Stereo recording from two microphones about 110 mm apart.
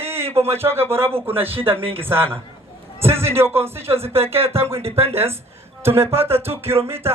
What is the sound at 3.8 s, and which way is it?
Speech, 65° right (ahead or behind).